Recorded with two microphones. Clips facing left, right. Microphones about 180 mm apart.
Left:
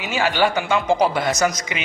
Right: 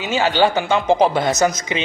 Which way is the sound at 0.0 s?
20° right (ahead or behind).